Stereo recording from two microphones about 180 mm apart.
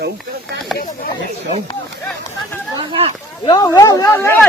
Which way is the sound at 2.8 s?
30° right (ahead or behind).